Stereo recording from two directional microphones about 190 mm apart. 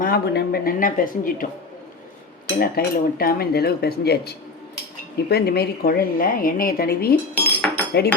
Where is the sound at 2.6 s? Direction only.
50° left (ahead or behind).